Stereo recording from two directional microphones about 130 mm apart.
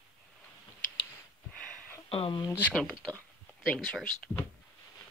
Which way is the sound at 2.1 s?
40° left (ahead or behind).